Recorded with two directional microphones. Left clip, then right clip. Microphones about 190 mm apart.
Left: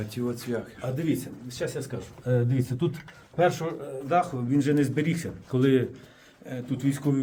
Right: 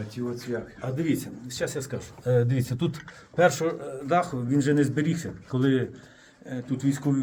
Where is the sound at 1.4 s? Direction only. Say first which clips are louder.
Right 1 dB; 60° right (ahead or behind).